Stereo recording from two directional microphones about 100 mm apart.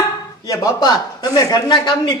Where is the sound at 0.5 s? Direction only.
40° left (ahead or behind).